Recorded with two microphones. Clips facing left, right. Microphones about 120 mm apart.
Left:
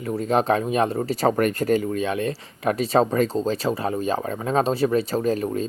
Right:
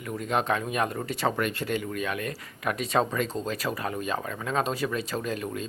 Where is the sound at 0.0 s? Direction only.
35° left (ahead or behind).